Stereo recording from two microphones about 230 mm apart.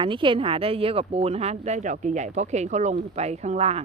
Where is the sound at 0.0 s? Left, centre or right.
Right.